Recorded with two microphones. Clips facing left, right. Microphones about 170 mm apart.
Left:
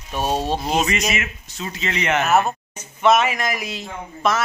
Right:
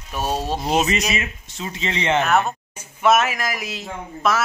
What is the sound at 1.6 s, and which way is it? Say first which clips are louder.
Speech: even; 25° right (ahead or behind).